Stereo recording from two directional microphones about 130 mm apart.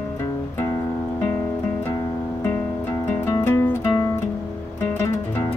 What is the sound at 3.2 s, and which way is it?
Music, 20° left (ahead or behind).